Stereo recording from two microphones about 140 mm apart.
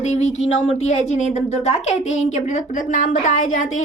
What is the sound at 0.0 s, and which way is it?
Speech, 55° left (ahead or behind).